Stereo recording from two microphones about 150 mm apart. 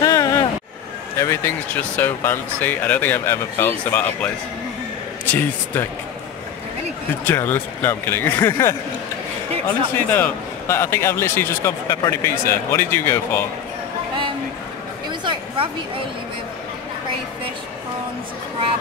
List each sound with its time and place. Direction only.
0.0 s vehicle: 25° left (ahead or behind)
1.1 s speech: 20° left (ahead or behind)
7.2 s speech: 15° left (ahead or behind)
15.0 s a sound: 35° right (ahead or behind)